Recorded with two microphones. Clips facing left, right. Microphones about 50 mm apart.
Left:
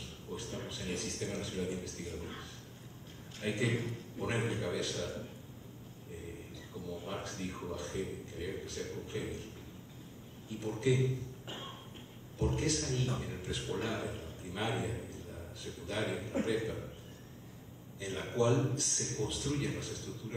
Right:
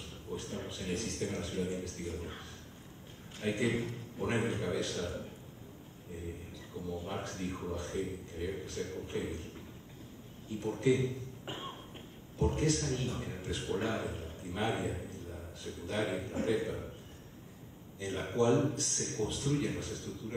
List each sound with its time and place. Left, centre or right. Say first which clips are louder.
0.4 s a sound: right 1 dB; right
0.9 s speech: right 3 dB; right
3.3 s a man's voice: right 2 dB; right
6.7 s a man's voice: right 2 dB; right
10.6 s a man's voice: right 2 dB; right
17.9 s a man's voice: right 1 dB; right